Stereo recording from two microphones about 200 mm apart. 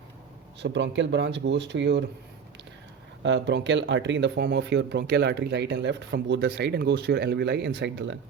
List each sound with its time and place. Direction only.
0.6 s speech: 65° right (ahead or behind)
3.2 s speech: 60° right (ahead or behind)